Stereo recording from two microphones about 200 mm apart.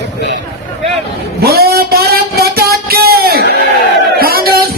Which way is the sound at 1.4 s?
50° right (ahead or behind).